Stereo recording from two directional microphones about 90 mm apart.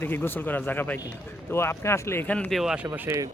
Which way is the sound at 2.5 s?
5° right (ahead or behind).